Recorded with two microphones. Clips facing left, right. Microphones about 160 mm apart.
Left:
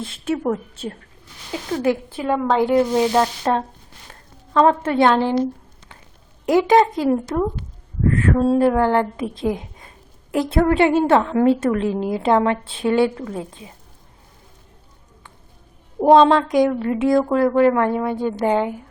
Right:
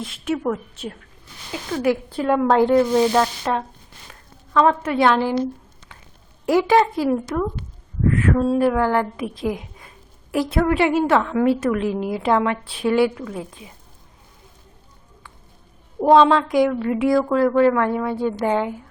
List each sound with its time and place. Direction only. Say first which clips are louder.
0.0 s a woman's voice: left 1 dB; 30° left (ahead or behind)
2.1 s a woman's voice: right 2 dB; centre (ahead or behind)
2.6 s speech: right 1 dB; 15° left (ahead or behind)
3.4 s a woman's voice: left 3 dB; 35° left (ahead or behind)
6.4 s a woman's voice: left 2 dB; 20° left (ahead or behind)
7.1 s a woman's voice: left 2 dB; 30° left (ahead or behind)
16.0 s speech: left 1 dB; 20° left (ahead or behind)
16.2 s a woman's voice: left 2 dB; 35° left (ahead or behind)
16.5 s a woman's voice: left 1 dB; 20° left (ahead or behind)